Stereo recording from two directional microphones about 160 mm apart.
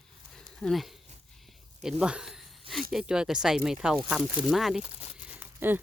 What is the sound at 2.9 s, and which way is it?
Speech, 5° right (ahead or behind).